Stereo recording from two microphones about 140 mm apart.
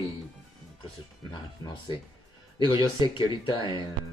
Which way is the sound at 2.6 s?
30° left (ahead or behind).